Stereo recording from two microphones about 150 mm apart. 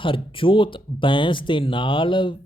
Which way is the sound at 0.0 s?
35° left (ahead or behind).